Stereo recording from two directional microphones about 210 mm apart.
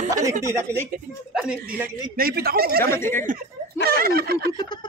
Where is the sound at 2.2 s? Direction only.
45° right (ahead or behind).